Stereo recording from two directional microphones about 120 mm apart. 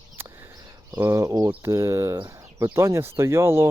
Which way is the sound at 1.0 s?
25° right (ahead or behind).